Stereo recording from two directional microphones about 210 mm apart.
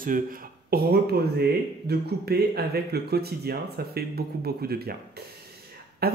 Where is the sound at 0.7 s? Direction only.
45° right (ahead or behind).